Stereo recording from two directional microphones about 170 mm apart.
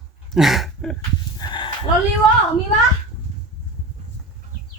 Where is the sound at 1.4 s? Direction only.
25° left (ahead or behind).